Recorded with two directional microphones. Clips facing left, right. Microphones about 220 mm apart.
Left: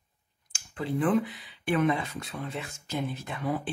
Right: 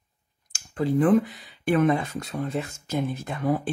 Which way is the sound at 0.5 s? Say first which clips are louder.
Right 7 dB; 40° right (ahead or behind).